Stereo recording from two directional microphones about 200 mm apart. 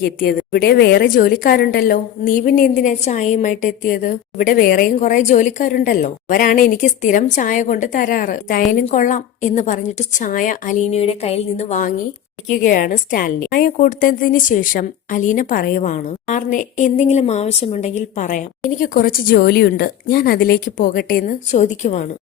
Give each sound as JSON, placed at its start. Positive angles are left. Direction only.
{"t": 0.0, "sound": "a woman's voice", "side_deg": 50}